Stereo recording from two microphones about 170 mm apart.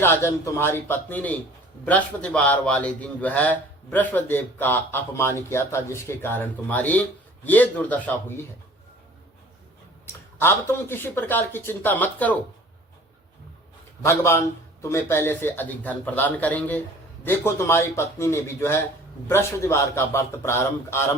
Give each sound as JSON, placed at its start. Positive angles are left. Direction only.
{"t": 0.0, "sound": "a man's voice", "side_deg": 15}
{"t": 10.4, "sound": "a man's voice", "side_deg": 15}
{"t": 14.0, "sound": "a man's voice", "side_deg": 15}